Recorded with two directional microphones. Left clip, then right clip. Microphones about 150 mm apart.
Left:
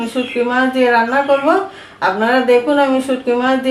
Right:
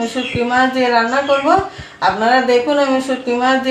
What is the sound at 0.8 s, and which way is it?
Speech, 10° left (ahead or behind).